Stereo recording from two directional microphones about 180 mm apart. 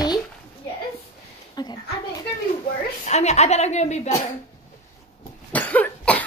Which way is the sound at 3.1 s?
40° left (ahead or behind).